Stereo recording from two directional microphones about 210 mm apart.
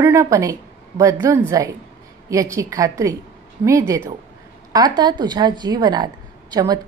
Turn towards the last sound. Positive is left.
turn(degrees=-20)  # may be behind; listen again after turning